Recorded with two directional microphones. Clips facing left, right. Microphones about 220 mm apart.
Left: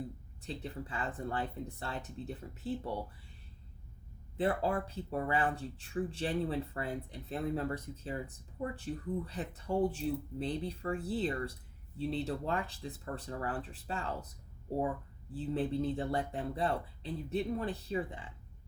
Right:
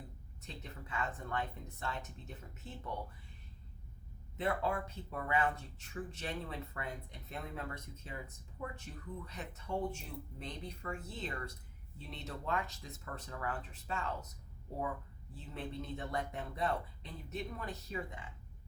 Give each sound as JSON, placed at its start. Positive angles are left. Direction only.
{"t": 0.4, "sound": "speech", "side_deg": 30}
{"t": 4.4, "sound": "speech", "side_deg": 35}
{"t": 15.3, "sound": "speech", "side_deg": 30}